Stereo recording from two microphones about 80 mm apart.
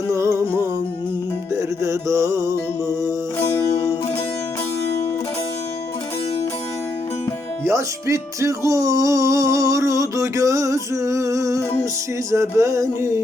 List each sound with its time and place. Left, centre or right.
0.1 s music: right
7.6 s music: right